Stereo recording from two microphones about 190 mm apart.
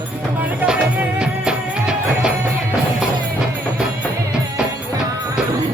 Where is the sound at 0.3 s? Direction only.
5° right (ahead or behind).